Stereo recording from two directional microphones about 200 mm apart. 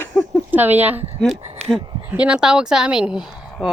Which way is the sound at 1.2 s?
5° left (ahead or behind).